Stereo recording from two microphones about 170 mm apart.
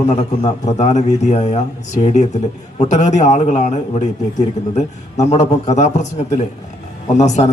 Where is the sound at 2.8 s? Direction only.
45° left (ahead or behind).